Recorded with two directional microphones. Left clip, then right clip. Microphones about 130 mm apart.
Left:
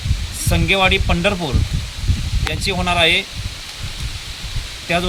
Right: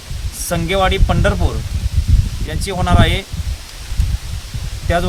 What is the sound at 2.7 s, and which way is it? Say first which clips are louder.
Speech: left 2 dB; 15° right (ahead or behind).